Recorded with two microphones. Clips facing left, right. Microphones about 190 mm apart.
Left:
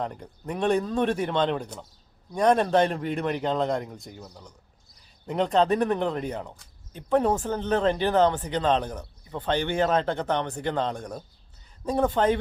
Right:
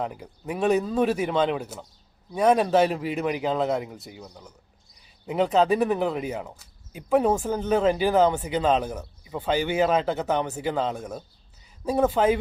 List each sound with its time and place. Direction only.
0.0 s speech: 5° right (ahead or behind)